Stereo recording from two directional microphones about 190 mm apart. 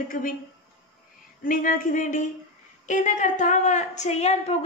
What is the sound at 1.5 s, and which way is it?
A woman's voice, 45° left (ahead or behind).